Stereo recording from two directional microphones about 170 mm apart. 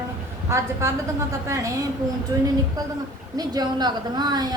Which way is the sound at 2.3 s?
20° right (ahead or behind).